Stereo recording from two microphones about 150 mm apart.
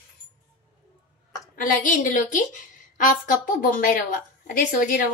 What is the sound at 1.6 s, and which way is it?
A woman's voice, 60° left (ahead or behind).